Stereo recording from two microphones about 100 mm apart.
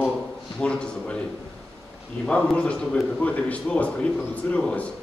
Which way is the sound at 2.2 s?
10° left (ahead or behind).